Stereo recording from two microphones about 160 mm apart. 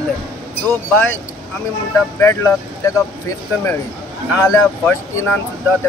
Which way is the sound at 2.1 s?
15° left (ahead or behind).